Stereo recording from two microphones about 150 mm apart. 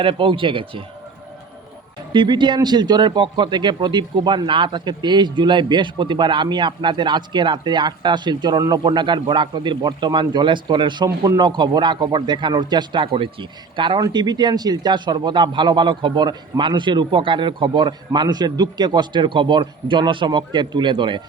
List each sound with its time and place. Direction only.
0.0 s a man's voice: 35° right (ahead or behind)
2.1 s a man's voice: 30° right (ahead or behind)